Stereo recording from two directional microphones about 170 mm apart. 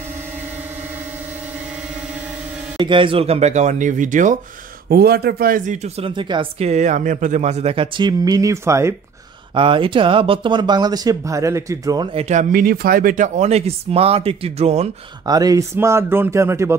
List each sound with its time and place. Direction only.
2.8 s speech: 30° right (ahead or behind); by 4.4 s 50° right (ahead or behind)
4.8 s speech: 65° right (ahead or behind)
5.9 s speech: 30° right (ahead or behind)
6.7 s speech: 45° right (ahead or behind); by 8.9 s 15° right (ahead or behind)
9.5 s speech: 30° right (ahead or behind)
15.2 s speech: 20° right (ahead or behind)